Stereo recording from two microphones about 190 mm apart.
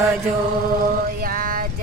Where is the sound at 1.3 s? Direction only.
45° right (ahead or behind).